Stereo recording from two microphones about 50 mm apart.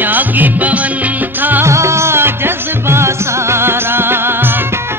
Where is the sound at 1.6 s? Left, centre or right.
Right.